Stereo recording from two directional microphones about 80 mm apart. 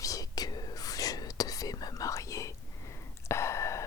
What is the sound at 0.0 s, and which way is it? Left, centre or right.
Whispering, left.